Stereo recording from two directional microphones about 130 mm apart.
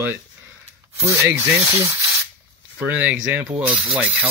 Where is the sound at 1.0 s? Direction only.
20° right (ahead or behind).